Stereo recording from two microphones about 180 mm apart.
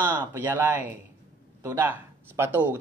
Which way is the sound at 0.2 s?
10° right (ahead or behind).